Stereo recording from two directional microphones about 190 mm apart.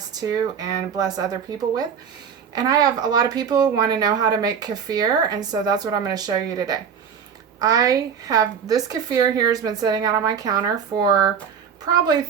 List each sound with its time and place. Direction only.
0.1 s speech: 20° right (ahead or behind)